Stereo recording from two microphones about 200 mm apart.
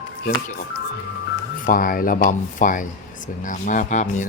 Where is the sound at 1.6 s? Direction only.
45° left (ahead or behind).